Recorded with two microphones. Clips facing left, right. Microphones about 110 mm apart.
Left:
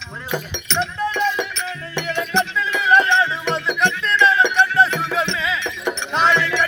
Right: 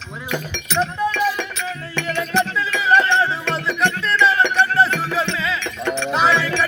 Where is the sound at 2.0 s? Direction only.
15° left (ahead or behind).